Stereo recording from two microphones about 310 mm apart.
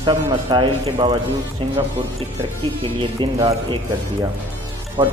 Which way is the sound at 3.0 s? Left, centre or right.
Centre.